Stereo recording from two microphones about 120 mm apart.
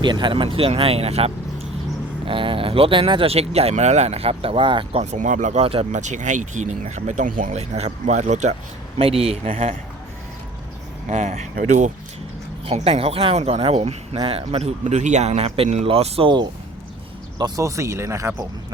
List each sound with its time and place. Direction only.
0.0 s speech: 40° right (ahead or behind); by 1.3 s 60° right (ahead or behind)
2.2 s speech: 45° right (ahead or behind)
5.1 s speech: 90° right
9.0 s speech: 55° right (ahead or behind)
11.1 s speech: 85° right
12.6 s speech: 55° right (ahead or behind)
17.6 s speech: 25° right (ahead or behind)